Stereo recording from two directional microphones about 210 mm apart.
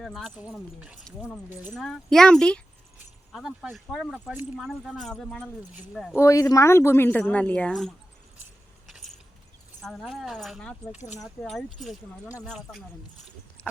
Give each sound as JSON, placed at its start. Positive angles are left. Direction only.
{"t": 0.0, "sound": "speech", "side_deg": 0}
{"t": 6.1, "sound": "speech", "side_deg": 15}
{"t": 8.9, "sound": "mechanisms", "side_deg": 0}
{"t": 9.8, "sound": "speech", "side_deg": 0}